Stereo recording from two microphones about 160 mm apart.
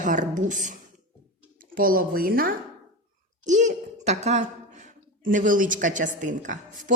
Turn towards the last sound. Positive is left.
turn(degrees=-50)  # may be behind; listen again after turning